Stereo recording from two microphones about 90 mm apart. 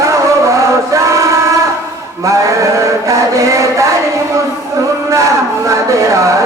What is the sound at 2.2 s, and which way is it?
Mantra, 35° right (ahead or behind).